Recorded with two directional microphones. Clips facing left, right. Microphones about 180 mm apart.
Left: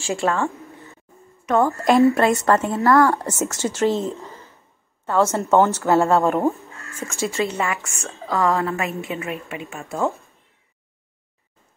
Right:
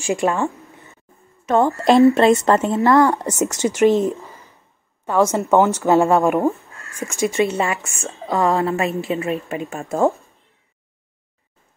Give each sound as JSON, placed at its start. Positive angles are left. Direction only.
{"t": 0.0, "sound": "a woman's voice", "side_deg": -15}
{"t": 6.4, "sound": "speech", "side_deg": 0}
{"t": 6.9, "sound": "a woman's voice", "side_deg": -15}
{"t": 9.5, "sound": "a woman's voice", "side_deg": -40}